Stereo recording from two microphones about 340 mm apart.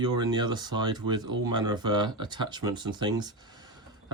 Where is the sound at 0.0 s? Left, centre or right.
Centre.